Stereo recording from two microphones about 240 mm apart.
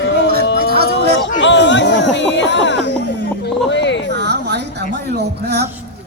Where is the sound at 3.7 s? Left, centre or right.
Left.